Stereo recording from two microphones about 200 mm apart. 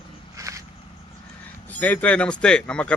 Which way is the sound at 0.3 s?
15° right (ahead or behind).